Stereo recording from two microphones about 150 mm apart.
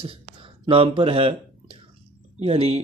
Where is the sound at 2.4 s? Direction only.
45° right (ahead or behind).